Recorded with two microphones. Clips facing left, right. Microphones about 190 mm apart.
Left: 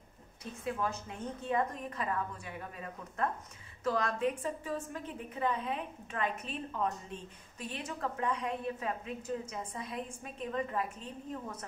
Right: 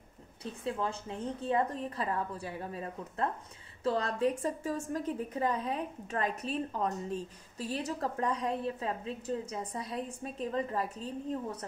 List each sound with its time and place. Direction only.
0.4 s a woman's voice: 30° right (ahead or behind)